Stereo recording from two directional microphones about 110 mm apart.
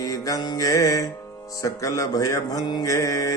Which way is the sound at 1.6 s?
30° left (ahead or behind).